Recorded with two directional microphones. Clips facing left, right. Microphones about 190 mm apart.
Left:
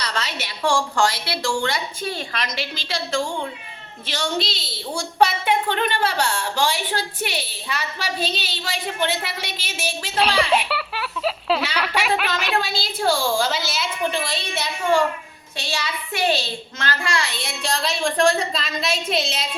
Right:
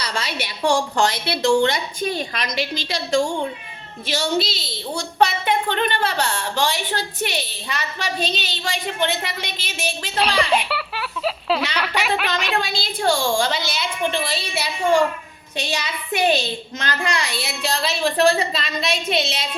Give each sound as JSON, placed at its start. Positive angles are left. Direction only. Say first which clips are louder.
{"t": 0.0, "sound": "a woman's voice", "louder": "right 1 dB", "side_deg": -10}
{"t": 4.9, "sound": "a woman's voice", "louder": "even", "side_deg": 10}
{"t": 17.3, "sound": "a woman's voice", "louder": "right 2 dB", "side_deg": -5}